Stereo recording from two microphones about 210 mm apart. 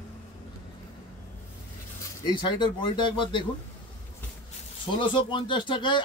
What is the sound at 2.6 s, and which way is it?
Speech, 20° left (ahead or behind).